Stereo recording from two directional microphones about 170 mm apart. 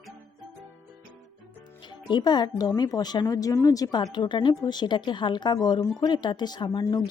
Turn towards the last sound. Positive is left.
turn(degrees=20)  # may be behind; listen again after turning